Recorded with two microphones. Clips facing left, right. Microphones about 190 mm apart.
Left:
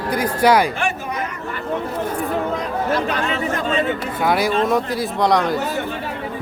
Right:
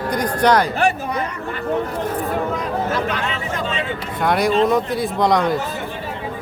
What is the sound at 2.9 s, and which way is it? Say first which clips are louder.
Chatter: left 2 dB; 45° left (ahead or behind).